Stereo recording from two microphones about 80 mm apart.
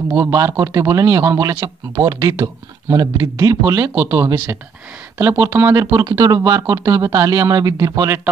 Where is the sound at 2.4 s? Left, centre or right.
Right.